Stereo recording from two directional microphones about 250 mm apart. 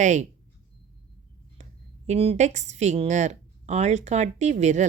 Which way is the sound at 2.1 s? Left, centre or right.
Right.